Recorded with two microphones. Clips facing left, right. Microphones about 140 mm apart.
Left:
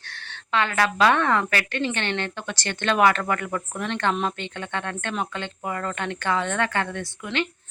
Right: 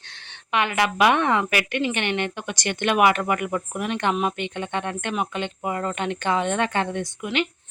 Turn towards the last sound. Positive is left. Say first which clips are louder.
# right 2 dB
turn(degrees=-15)  # may be behind; listen again after turning